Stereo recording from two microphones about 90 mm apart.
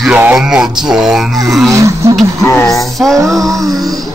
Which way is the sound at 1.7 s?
35° right (ahead or behind).